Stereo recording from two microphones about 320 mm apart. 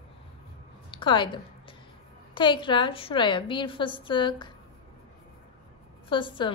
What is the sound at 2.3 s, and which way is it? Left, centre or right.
A woman's voice, centre.